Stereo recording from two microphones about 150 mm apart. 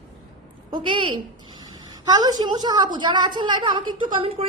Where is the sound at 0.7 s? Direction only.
35° right (ahead or behind).